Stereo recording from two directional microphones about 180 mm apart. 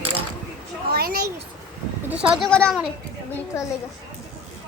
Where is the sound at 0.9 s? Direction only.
60° right (ahead or behind).